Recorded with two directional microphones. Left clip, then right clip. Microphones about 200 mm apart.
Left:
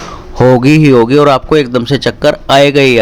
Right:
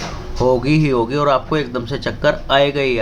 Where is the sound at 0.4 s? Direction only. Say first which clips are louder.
Left 9 dB; 45° left (ahead or behind).